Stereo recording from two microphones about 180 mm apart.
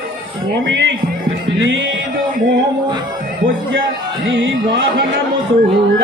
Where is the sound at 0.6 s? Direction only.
75° right (ahead or behind).